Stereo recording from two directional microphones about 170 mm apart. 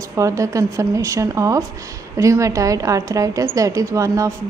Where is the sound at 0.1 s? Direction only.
20° right (ahead or behind).